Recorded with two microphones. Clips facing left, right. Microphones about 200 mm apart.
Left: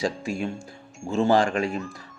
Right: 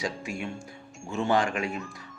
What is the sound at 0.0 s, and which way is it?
Speech, 35° left (ahead or behind).